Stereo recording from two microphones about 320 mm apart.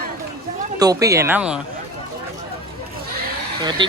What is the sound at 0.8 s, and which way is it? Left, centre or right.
Speech, centre.